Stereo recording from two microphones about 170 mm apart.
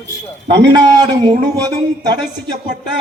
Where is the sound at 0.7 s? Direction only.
25° right (ahead or behind).